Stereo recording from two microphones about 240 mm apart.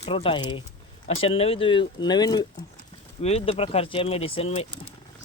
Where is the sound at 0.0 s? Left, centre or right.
Left.